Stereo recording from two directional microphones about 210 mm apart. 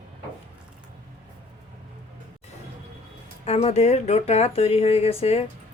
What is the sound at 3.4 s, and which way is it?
Speech, 30° left (ahead or behind).